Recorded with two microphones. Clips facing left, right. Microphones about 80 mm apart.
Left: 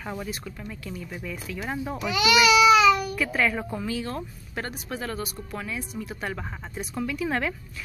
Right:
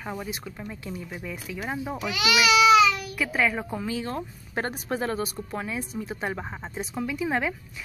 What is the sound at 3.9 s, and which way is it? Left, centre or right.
Speech, right.